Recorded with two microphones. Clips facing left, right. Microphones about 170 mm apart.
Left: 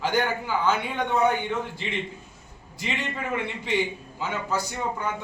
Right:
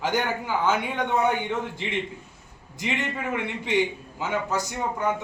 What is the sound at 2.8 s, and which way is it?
A man's voice, 15° right (ahead or behind).